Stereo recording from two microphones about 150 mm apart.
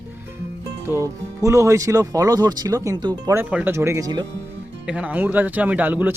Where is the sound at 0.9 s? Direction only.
20° right (ahead or behind).